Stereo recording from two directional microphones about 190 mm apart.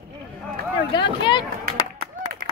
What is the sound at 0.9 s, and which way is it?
Speech, 25° left (ahead or behind).